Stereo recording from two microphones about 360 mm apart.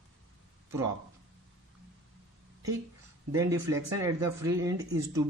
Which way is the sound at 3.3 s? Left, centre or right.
Centre.